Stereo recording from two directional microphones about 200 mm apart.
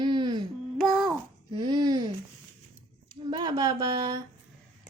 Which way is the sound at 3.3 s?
20° right (ahead or behind).